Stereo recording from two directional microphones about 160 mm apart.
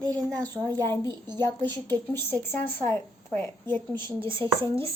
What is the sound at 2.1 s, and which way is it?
Speech, 15° left (ahead or behind).